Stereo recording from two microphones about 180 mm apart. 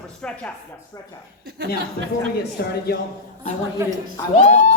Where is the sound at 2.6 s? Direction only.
60° left (ahead or behind).